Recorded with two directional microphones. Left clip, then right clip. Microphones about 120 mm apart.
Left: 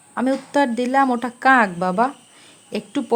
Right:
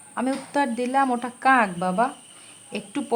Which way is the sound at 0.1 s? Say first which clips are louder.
Left 5 dB; 35° left (ahead or behind).